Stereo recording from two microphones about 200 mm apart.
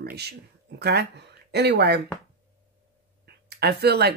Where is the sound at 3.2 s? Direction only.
55° right (ahead or behind).